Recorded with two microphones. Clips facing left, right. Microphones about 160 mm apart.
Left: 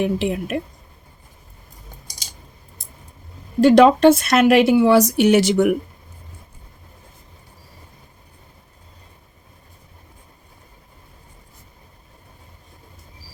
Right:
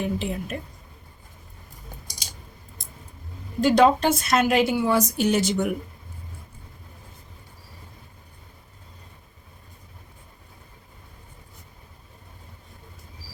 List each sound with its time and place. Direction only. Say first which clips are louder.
0.0 s speech: left 7 dB; 75° left (ahead or behind)
3.6 s a woman's voice: left 7 dB; 80° left